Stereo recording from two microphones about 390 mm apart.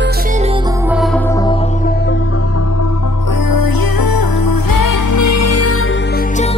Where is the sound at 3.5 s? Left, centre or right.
Left.